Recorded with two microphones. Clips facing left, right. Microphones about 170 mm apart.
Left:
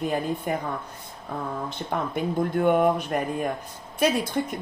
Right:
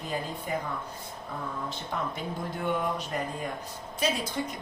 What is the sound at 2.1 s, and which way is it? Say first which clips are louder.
A woman's voice: left 10 dB; 55° left (ahead or behind).